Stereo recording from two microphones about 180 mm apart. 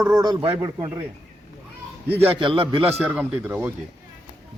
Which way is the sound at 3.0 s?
10° right (ahead or behind).